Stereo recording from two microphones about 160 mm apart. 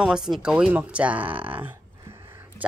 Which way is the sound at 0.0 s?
5° right (ahead or behind).